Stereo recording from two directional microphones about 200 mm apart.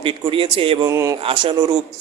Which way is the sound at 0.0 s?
25° right (ahead or behind).